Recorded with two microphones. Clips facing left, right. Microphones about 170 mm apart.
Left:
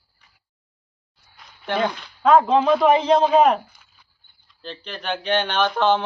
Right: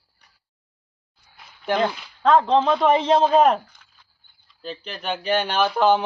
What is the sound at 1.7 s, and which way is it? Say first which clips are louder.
Speech: even; centre (ahead or behind).